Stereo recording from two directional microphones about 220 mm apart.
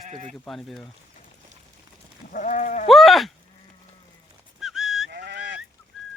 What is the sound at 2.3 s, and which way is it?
Sheep, 35° left (ahead or behind).